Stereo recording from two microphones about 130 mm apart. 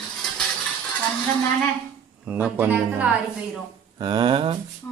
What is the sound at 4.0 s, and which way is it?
Speech, 35° right (ahead or behind).